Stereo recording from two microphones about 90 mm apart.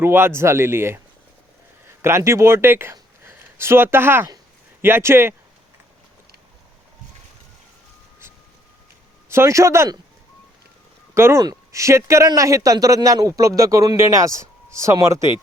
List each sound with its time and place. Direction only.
0.0 s speech: 25° right (ahead or behind)
9.3 s speech: 30° right (ahead or behind)
11.1 s speech: 30° right (ahead or behind)